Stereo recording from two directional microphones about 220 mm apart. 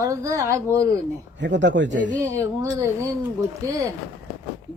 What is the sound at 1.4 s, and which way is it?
Speech, 55° right (ahead or behind).